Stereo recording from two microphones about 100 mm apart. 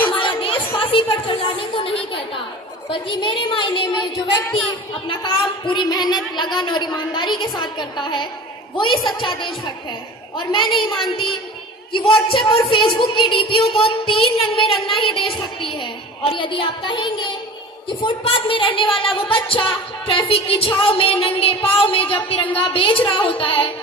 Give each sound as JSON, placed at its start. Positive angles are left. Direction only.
{"t": 0.1, "sound": "music", "side_deg": 60}
{"t": 0.8, "sound": "a sound", "side_deg": 60}
{"t": 2.9, "sound": "a woman's voice", "side_deg": 55}
{"t": 5.0, "sound": "a woman's voice", "side_deg": 50}